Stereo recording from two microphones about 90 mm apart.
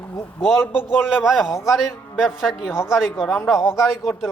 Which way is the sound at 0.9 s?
5° right (ahead or behind).